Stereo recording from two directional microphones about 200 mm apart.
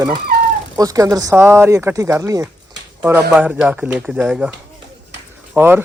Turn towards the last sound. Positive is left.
turn(degrees=-10)  # may be behind; listen again after turning